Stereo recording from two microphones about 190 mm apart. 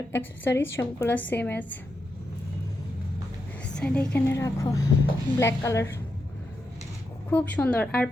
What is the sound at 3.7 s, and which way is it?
A woman's voice, 5° left (ahead or behind).